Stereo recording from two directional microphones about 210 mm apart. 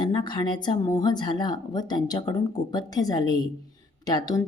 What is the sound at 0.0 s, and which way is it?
Speech, 20° left (ahead or behind).